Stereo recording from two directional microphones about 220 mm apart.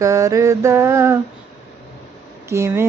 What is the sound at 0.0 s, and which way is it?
Mantra, 15° right (ahead or behind).